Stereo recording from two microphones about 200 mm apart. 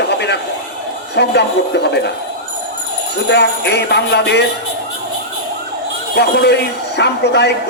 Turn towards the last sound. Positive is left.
turn(degrees=55)  # may be behind; listen again after turning